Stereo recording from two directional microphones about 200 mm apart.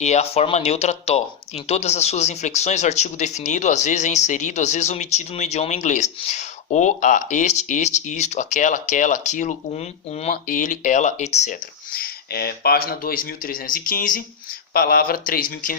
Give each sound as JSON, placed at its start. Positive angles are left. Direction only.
{"t": 0.0, "sound": "speech", "side_deg": 35}